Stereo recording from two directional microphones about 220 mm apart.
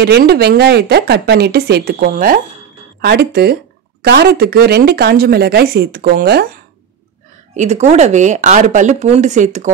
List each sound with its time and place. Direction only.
0.0 s speech: 45° right (ahead or behind)
7.5 s speech: 30° right (ahead or behind)